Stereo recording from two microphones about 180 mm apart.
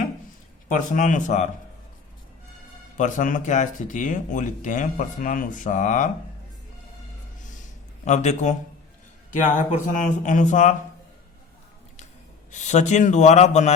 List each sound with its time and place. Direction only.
0.7 s speech: 45° left (ahead or behind)
3.0 s speech: 45° left (ahead or behind)
8.0 s a man's voice: 40° left (ahead or behind)
9.6 s speech: 45° left (ahead or behind)
12.5 s a man's voice: 40° left (ahead or behind)